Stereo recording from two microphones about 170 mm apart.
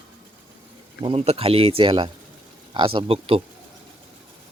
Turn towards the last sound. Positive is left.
turn(degrees=-35)  # may be behind; listen again after turning